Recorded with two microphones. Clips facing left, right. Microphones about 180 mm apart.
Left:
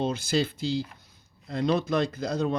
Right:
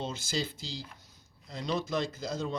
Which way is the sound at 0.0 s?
60° left (ahead or behind).